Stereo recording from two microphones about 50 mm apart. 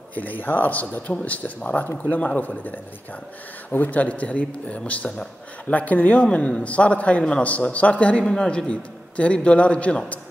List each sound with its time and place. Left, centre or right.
0.1 s a man's voice: left
3.7 s a man's voice: left
6.2 s a man's voice: centre